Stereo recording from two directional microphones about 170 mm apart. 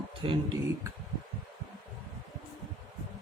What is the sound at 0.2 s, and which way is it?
Speech, 30° right (ahead or behind).